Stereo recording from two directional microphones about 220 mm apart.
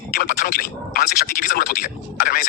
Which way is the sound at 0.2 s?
40° left (ahead or behind).